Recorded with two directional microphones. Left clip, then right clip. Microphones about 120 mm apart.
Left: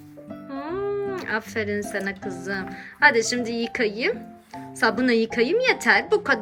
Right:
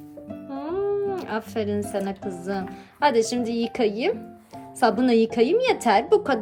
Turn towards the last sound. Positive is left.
turn(degrees=-20)  # may be behind; listen again after turning